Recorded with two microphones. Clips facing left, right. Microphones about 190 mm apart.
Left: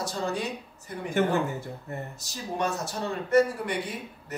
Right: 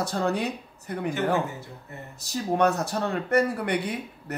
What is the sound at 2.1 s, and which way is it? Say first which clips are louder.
Speech: right 10 dB; 60° right (ahead or behind).